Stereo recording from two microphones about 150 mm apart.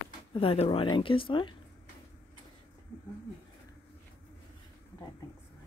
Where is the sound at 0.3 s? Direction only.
35° left (ahead or behind).